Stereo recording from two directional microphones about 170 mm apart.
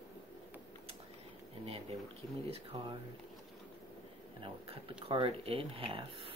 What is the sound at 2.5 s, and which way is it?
Speech, 35° right (ahead or behind).